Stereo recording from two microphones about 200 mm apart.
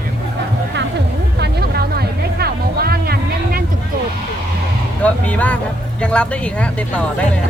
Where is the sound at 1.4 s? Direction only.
55° right (ahead or behind).